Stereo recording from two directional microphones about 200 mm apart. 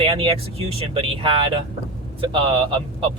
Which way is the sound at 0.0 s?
25° right (ahead or behind).